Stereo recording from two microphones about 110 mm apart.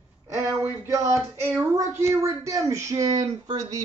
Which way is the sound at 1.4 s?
25° right (ahead or behind).